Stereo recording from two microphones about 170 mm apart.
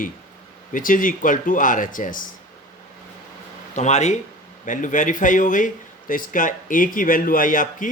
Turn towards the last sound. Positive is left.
turn(degrees=50)  # may be behind; listen again after turning